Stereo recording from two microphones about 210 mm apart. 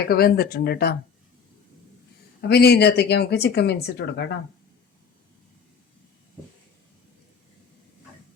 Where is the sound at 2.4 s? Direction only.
50° left (ahead or behind).